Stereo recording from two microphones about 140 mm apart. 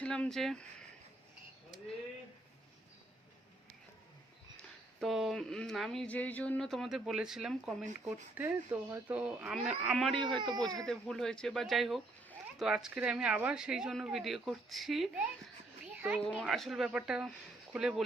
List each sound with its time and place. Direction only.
0.0 s speech: 5° left (ahead or behind)
4.5 s speech: centre (ahead or behind)
10.2 s speech: 35° right (ahead or behind)
10.8 s a child's voice: 5° left (ahead or behind)
16.4 s speech: centre (ahead or behind)